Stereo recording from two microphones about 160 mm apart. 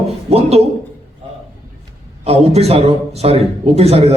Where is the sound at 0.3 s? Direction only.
40° right (ahead or behind).